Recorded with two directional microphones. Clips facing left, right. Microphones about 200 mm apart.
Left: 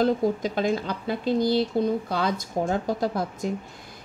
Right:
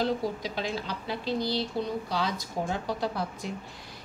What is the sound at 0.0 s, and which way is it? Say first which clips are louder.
A woman's voice: left 7 dB; 50° left (ahead or behind).